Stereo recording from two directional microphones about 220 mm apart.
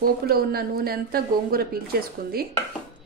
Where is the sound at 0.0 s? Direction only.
45° right (ahead or behind).